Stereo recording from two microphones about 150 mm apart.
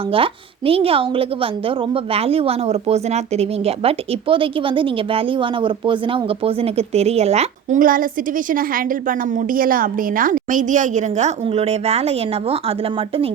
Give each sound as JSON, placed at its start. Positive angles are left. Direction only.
{"t": 0.1, "sound": "a woman's voice", "side_deg": -40}
{"t": 7.8, "sound": "a woman's voice", "side_deg": -65}